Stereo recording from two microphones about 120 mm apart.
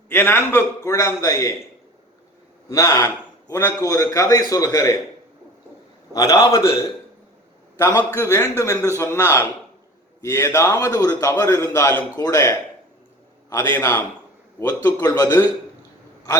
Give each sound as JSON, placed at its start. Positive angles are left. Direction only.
{"t": 0.1, "sound": "a man's voice", "side_deg": 20}
{"t": 2.6, "sound": "a man's voice", "side_deg": 25}
{"t": 6.1, "sound": "a man's voice", "side_deg": 25}
{"t": 7.8, "sound": "a man's voice", "side_deg": 35}